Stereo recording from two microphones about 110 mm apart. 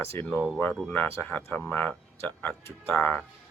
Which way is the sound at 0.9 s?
20° left (ahead or behind).